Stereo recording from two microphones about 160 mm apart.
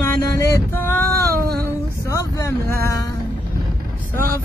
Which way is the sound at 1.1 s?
75° right (ahead or behind).